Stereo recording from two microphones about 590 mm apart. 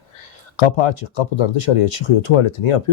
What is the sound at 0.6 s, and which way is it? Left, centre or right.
Speech, left.